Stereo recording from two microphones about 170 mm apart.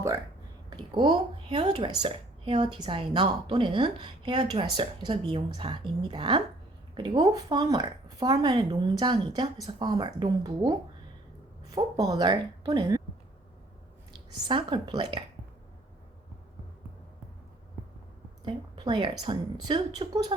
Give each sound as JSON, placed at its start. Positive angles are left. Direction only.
{"t": 0.7, "sound": "a woman's voice", "side_deg": -25}
{"t": 14.1, "sound": "a woman's voice", "side_deg": -30}
{"t": 18.4, "sound": "a woman's voice", "side_deg": -30}